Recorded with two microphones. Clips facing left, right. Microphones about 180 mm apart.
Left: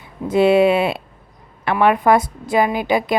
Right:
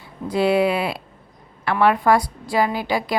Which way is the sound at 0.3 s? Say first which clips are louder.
Left 5 dB; 20° left (ahead or behind).